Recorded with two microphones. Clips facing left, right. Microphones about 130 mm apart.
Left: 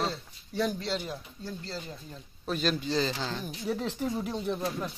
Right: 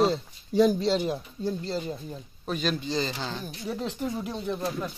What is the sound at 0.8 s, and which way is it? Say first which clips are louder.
Speech: right 8 dB; 25° right (ahead or behind).